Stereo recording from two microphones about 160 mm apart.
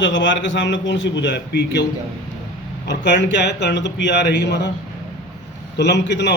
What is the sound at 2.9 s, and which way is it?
A man's voice, 90° left.